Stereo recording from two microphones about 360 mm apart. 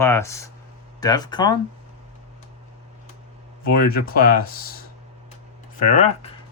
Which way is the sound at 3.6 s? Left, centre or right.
Left.